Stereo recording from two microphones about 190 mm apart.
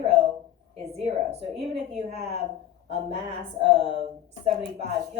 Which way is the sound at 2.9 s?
30° right (ahead or behind).